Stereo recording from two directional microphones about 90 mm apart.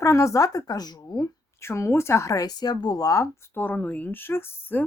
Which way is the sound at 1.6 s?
30° left (ahead or behind).